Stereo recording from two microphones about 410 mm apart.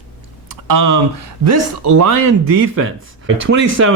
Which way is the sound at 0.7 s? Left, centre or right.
Right.